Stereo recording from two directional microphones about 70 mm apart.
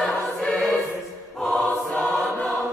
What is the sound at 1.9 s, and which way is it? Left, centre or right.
Choir, centre.